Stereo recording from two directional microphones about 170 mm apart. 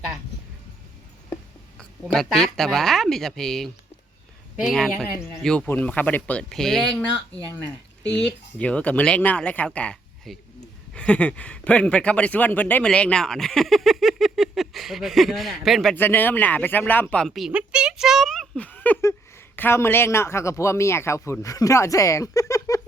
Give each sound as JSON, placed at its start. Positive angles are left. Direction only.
{"t": 2.1, "sound": "speech", "side_deg": 5}
{"t": 4.7, "sound": "speech", "side_deg": 0}
{"t": 8.1, "sound": "speech", "side_deg": 5}
{"t": 16.0, "sound": "speech", "side_deg": 10}